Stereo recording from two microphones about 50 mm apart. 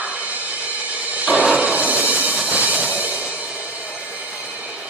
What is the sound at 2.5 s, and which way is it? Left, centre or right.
Train, right.